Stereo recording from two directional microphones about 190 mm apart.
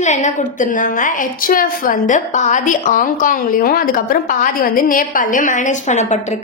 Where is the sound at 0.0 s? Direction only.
40° left (ahead or behind).